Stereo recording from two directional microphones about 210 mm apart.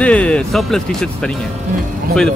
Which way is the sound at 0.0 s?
5° left (ahead or behind).